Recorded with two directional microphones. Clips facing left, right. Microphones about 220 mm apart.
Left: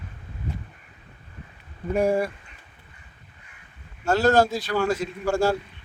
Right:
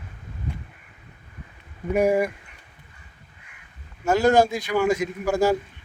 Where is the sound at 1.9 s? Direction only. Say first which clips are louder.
Right 2 dB; 10° right (ahead or behind).